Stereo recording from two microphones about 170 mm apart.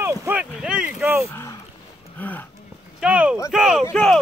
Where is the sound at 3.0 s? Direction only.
5° right (ahead or behind).